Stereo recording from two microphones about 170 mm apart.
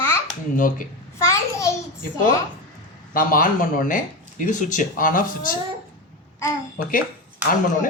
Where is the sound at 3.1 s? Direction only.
55° left (ahead or behind).